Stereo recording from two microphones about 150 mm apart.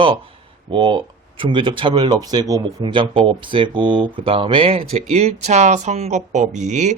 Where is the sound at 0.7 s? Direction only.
35° right (ahead or behind).